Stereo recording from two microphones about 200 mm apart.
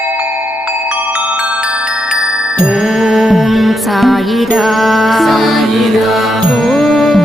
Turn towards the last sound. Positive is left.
turn(degrees=0)  # may be behind; listen again after turning